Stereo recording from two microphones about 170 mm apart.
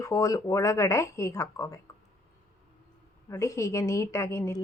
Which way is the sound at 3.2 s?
15° left (ahead or behind).